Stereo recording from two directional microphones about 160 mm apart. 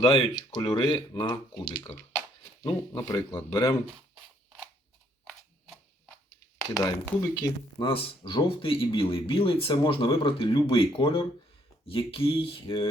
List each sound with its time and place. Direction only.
0.3 s speech: 25° left (ahead or behind)
5.3 s a sound: 5° left (ahead or behind)
6.7 s speech: 20° left (ahead or behind)